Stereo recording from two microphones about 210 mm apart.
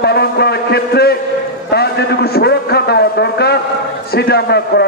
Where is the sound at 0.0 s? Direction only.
50° left (ahead or behind).